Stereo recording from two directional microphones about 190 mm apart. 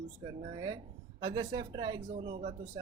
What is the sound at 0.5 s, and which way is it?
A man's voice, 20° right (ahead or behind).